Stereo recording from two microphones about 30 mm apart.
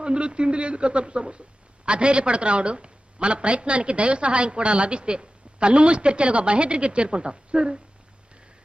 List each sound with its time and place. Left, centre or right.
0.0 s speech: right